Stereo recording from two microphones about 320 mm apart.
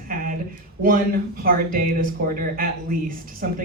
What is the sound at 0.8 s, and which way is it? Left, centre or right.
Speech, right.